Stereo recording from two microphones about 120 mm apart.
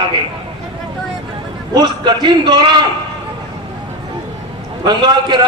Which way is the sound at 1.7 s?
35° right (ahead or behind).